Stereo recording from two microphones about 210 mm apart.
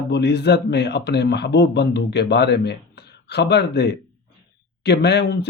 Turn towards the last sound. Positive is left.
turn(degrees=50)  # may be behind; listen again after turning